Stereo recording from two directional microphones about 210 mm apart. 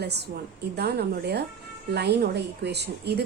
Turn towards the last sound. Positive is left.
turn(degrees=-50)  # may be behind; listen again after turning